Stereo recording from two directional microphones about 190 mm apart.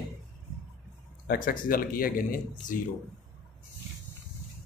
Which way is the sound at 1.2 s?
50° left (ahead or behind).